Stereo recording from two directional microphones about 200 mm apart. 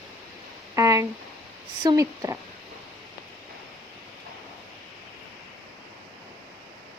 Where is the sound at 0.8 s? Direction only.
15° right (ahead or behind).